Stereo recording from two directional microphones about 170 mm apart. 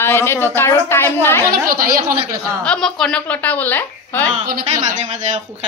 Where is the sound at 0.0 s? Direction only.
15° left (ahead or behind).